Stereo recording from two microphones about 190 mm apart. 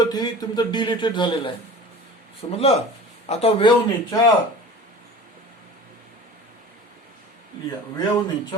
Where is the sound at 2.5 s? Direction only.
35° left (ahead or behind).